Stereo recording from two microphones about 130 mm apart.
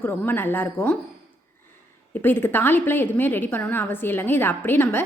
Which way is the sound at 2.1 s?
15° left (ahead or behind).